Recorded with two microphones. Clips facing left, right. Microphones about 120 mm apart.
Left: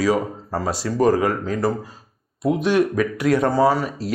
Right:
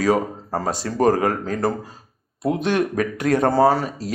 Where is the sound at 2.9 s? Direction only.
45° right (ahead or behind).